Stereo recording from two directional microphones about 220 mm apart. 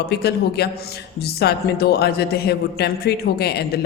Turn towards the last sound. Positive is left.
turn(degrees=45)  # may be behind; listen again after turning